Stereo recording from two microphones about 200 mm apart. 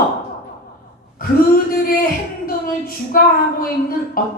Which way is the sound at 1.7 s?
50° left (ahead or behind).